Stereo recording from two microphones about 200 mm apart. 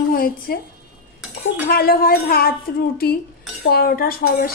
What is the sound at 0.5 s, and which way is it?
Speech, 50° left (ahead or behind).